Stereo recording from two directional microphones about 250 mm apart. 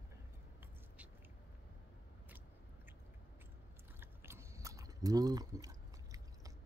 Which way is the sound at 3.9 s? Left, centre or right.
Centre.